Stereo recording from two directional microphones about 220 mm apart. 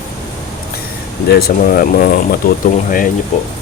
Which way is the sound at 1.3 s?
40° left (ahead or behind).